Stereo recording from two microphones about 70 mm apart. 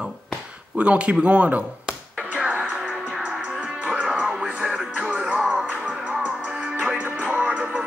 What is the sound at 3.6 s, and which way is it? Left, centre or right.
Music, centre.